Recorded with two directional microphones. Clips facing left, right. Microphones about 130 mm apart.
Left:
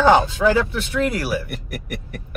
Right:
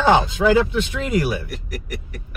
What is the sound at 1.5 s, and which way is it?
Speech, 55° left (ahead or behind).